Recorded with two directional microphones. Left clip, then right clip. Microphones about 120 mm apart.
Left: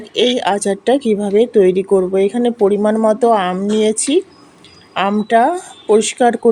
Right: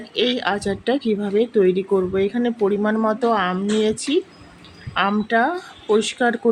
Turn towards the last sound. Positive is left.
turn(degrees=45)  # may be behind; listen again after turning